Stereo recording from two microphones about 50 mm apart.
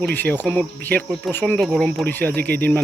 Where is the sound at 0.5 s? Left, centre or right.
Left.